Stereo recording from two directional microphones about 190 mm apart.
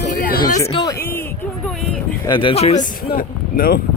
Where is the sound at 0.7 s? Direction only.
25° left (ahead or behind).